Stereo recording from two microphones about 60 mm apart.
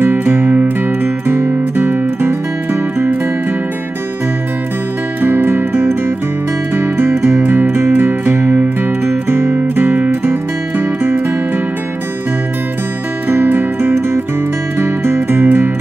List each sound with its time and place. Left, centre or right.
0.5 s music: right
5.2 s music: right
7.0 s music: right
9.6 s music: right
13.3 s music: right